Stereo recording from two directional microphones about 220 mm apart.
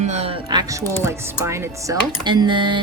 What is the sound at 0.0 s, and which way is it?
Music, 30° right (ahead or behind).